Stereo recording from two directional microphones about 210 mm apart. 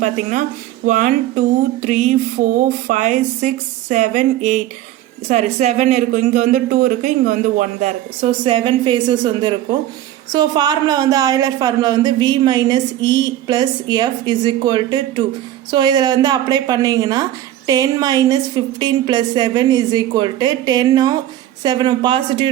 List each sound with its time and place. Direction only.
0.0 s a woman's voice: 35° right (ahead or behind)